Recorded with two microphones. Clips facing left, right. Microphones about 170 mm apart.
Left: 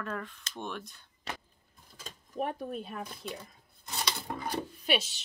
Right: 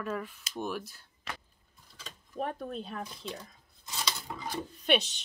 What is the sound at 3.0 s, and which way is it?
Speech, 55° left (ahead or behind).